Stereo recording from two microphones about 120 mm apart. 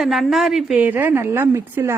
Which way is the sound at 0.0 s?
Centre (ahead or behind).